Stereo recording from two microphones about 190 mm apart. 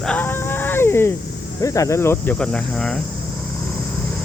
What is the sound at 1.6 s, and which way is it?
Cricket, 15° left (ahead or behind).